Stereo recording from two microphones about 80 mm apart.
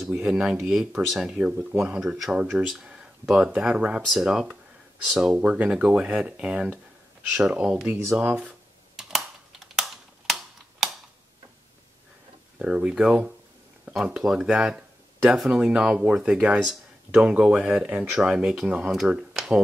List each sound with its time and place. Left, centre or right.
0.1 s speech: centre
7.9 s a sound: right; by 11.0 s centre
12.5 s speech: centre